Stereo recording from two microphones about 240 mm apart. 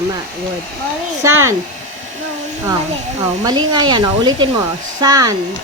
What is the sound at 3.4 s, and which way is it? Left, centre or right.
Speech, centre.